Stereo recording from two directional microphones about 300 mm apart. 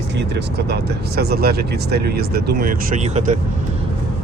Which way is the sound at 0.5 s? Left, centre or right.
Right.